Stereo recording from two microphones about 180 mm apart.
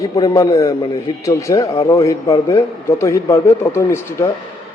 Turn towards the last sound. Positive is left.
turn(degrees=15)  # may be behind; listen again after turning